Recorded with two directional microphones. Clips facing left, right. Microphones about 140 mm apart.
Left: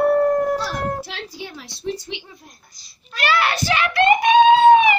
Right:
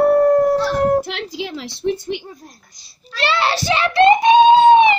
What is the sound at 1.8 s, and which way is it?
Speech, 55° right (ahead or behind).